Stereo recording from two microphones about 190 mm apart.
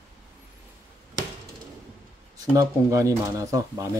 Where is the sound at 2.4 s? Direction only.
15° right (ahead or behind).